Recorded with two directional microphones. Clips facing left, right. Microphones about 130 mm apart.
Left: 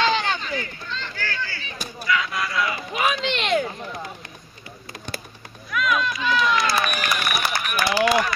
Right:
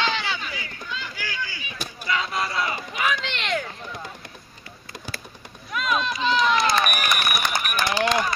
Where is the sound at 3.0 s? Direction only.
20° left (ahead or behind).